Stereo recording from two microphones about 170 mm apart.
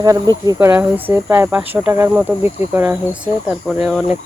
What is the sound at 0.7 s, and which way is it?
Speech, 10° right (ahead or behind).